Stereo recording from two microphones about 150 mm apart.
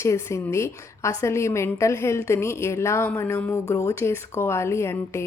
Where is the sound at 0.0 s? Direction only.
20° left (ahead or behind).